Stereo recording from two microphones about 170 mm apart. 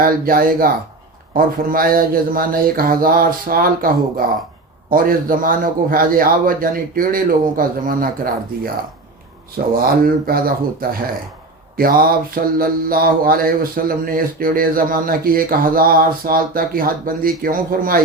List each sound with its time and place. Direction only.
0.0 s mantra: 60° right (ahead or behind)
9.7 s mantra: 60° right (ahead or behind)